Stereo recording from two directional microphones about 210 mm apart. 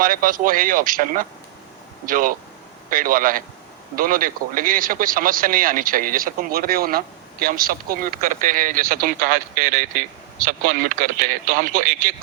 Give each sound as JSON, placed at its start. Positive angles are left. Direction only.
{"t": 0.0, "sound": "speech", "side_deg": -40}